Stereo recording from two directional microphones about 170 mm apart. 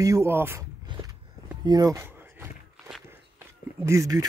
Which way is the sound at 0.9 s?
20° right (ahead or behind).